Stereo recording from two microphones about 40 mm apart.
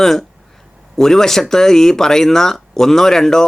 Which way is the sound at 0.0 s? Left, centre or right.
Centre.